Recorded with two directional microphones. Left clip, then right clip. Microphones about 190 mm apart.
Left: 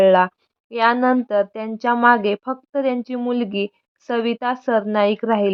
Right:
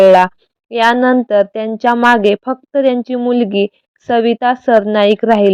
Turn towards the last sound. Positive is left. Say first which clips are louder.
# right 8 dB
turn(degrees=-25)  # may be behind; listen again after turning